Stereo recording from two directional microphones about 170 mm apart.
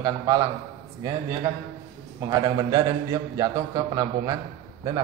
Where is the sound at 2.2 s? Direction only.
25° right (ahead or behind).